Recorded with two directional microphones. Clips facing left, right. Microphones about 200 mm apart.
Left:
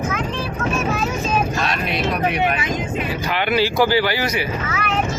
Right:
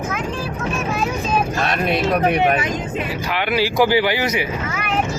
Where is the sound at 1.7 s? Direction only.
50° right (ahead or behind).